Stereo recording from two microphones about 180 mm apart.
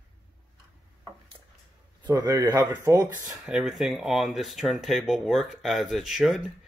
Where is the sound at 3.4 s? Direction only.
5° right (ahead or behind).